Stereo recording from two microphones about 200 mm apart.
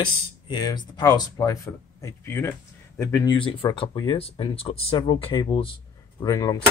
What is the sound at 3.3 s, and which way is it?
Speech, 25° left (ahead or behind).